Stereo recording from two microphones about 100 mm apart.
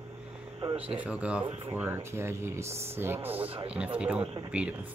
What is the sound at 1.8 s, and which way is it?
Speech, 25° right (ahead or behind).